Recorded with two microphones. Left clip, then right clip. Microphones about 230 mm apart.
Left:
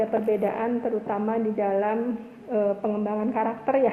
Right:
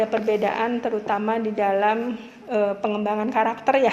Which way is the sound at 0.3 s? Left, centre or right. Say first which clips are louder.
Right 3 dB; right.